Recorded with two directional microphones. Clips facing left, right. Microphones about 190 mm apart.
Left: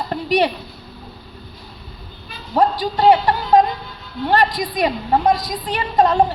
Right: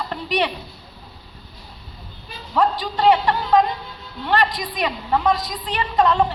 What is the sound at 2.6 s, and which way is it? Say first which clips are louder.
A woman's voice: left 3 dB; 35° left (ahead or behind).